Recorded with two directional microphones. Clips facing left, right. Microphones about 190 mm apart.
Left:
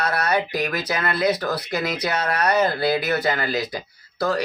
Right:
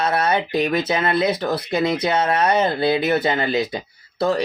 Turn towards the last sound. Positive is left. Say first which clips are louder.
# right 3 dB
turn(degrees=-25)  # may be behind; listen again after turning